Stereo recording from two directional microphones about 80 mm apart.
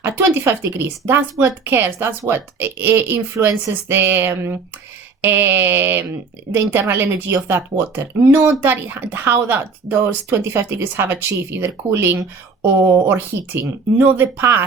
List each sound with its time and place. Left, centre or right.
0.0 s speech: right